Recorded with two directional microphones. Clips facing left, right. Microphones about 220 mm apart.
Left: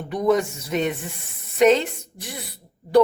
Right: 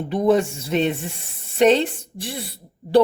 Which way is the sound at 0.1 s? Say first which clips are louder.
Right 2 dB; 30° right (ahead or behind).